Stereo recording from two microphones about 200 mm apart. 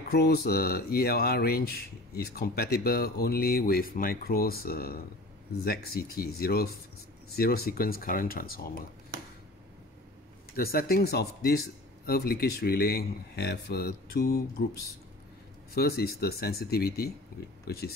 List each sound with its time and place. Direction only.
0.1 s speech: 50° left (ahead or behind)
10.5 s speech: 50° left (ahead or behind)
15.7 s speech: 50° left (ahead or behind)